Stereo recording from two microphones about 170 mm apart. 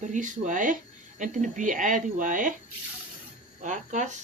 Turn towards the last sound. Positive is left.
turn(degrees=-45)  # may be behind; listen again after turning